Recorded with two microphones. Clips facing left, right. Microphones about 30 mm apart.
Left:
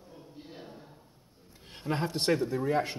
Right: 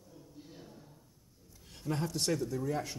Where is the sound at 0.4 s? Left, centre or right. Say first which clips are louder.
Left 6 dB; left.